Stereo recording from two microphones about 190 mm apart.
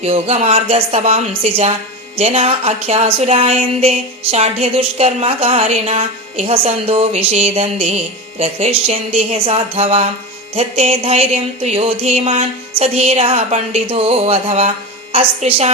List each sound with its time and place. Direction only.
0.0 s speech: 35° right (ahead or behind)